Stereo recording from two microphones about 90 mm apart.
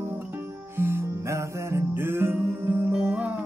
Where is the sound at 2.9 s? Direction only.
10° right (ahead or behind).